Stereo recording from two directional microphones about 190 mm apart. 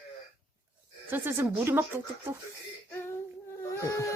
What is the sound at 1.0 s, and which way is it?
Speech, 10° right (ahead or behind).